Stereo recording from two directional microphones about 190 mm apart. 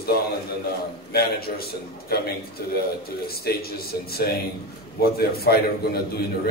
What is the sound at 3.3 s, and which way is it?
A man's voice, 55° left (ahead or behind).